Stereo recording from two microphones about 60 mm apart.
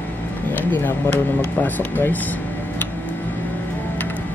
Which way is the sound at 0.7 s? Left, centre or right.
Left.